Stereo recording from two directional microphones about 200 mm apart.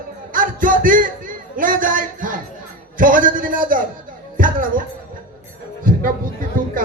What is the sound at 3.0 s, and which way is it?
Speech, 40° right (ahead or behind).